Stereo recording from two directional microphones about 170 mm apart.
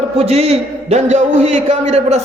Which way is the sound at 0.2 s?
35° right (ahead or behind).